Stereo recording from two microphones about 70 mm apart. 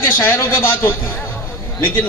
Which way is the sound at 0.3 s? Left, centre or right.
Left.